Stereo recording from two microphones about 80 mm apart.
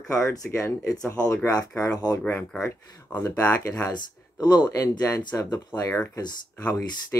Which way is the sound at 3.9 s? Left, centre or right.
Left.